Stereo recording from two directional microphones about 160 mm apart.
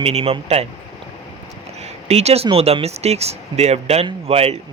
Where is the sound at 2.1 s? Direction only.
40° right (ahead or behind).